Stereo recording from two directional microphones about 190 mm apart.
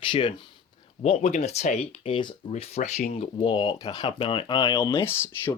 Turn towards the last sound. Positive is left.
turn(degrees=10)  # may be behind; listen again after turning